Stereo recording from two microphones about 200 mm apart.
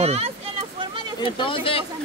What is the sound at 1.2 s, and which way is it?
Speech, 25° left (ahead or behind).